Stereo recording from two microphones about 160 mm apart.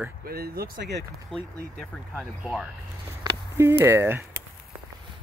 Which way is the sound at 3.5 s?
15° right (ahead or behind).